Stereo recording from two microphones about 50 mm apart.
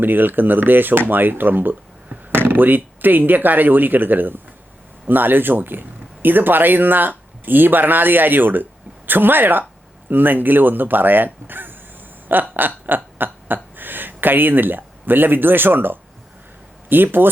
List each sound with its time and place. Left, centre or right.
0.0 s speech: right
12.3 s a sound: right
16.9 s speech: right